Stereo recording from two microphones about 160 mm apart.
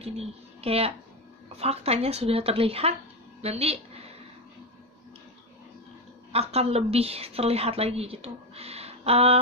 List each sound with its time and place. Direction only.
0.0 s a woman's voice: 40° right (ahead or behind)
6.3 s a woman's voice: 40° right (ahead or behind)